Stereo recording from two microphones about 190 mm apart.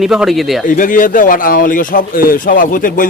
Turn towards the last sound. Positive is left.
turn(degrees=45)  # may be behind; listen again after turning